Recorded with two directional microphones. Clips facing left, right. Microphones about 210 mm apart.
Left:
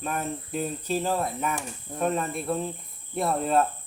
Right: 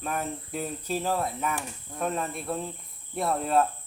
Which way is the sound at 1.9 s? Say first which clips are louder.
Left 4 dB; 25° left (ahead or behind).